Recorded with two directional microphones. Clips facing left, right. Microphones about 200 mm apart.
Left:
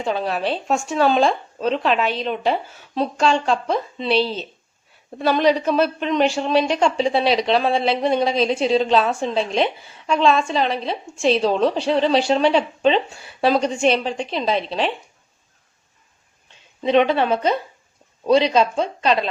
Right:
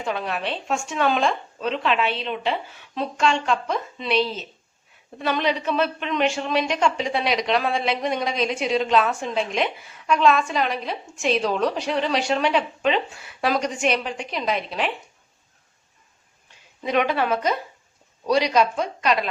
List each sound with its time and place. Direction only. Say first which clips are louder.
0.0 s a woman's voice: left 5 dB; 30° left (ahead or behind)
16.8 s speech: left 5 dB; 25° left (ahead or behind)